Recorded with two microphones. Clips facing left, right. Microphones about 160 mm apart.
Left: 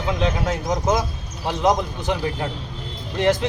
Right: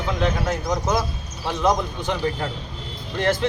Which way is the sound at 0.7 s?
20° left (ahead or behind).